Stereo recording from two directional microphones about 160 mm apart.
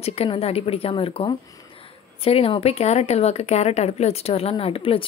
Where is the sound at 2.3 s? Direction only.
35° left (ahead or behind).